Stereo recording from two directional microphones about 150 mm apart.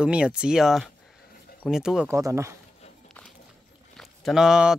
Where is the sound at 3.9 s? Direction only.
Centre (ahead or behind).